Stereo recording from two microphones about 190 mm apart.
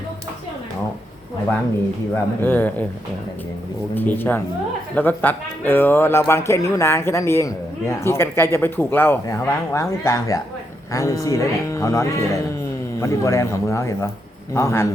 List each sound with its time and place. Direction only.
2.1 s a man's voice: 10° left (ahead or behind)
3.9 s a man's voice: 10° left (ahead or behind)